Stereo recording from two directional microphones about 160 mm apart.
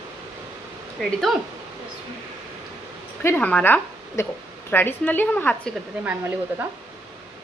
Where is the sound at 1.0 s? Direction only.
Centre (ahead or behind).